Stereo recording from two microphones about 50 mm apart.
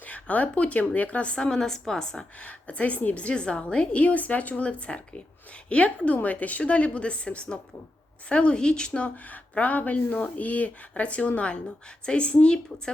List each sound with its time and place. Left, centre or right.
0.0 s a woman's voice: left; by 2.2 s centre
2.4 s a woman's voice: left
8.9 s a woman's voice: left